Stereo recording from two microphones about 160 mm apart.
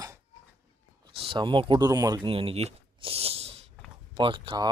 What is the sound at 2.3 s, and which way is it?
Speech, 35° right (ahead or behind).